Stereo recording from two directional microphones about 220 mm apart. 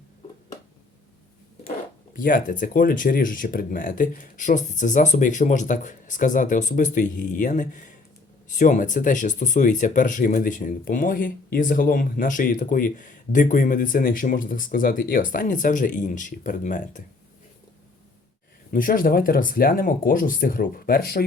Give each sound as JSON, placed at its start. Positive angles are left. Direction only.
{"t": 2.1, "sound": "speech", "side_deg": 40}
{"t": 18.7, "sound": "speech", "side_deg": 40}